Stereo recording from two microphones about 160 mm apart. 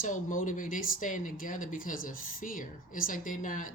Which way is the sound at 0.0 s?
55° left (ahead or behind).